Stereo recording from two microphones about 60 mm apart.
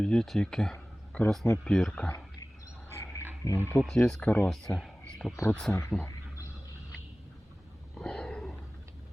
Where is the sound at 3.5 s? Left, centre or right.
Left.